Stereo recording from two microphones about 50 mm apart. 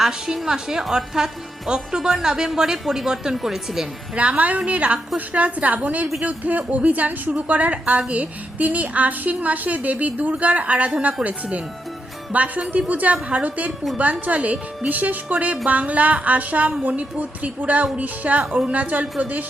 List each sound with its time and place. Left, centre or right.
0.0 s speech: centre
4.1 s a woman's voice: right